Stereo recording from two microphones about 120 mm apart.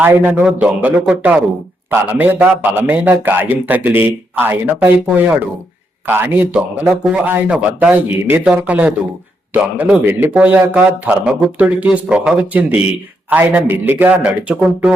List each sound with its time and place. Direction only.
0.0 s a man's voice: 15° right (ahead or behind)
6.1 s a man's voice: 15° right (ahead or behind)